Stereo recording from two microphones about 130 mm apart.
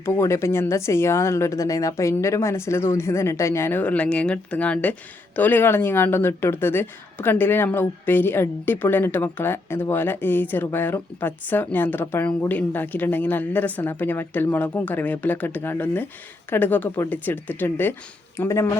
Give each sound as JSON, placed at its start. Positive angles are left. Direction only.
{"t": 0.0, "sound": "a woman's voice", "side_deg": 20}